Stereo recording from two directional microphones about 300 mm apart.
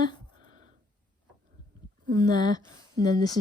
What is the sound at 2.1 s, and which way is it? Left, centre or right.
A woman's voice, centre.